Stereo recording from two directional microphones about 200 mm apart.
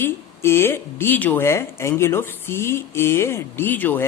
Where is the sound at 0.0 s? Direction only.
10° left (ahead or behind).